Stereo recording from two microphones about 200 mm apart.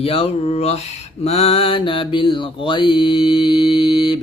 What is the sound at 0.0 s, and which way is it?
Mantra, 30° left (ahead or behind).